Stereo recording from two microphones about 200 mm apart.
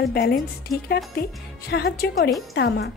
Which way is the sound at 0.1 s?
50° left (ahead or behind).